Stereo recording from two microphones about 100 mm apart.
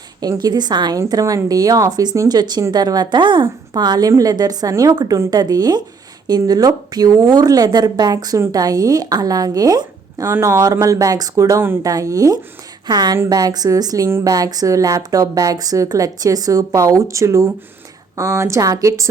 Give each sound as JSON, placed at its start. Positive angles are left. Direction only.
{"t": 0.2, "sound": "a woman's voice", "side_deg": -40}